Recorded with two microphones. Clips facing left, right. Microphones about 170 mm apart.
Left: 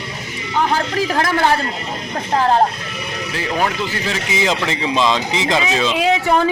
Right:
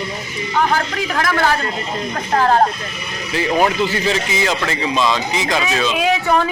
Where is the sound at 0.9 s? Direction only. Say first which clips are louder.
Left 2 dB; 30° left (ahead or behind).